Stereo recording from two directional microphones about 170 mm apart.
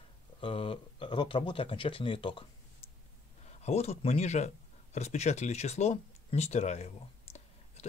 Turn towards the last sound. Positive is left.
turn(degrees=40)  # may be behind; listen again after turning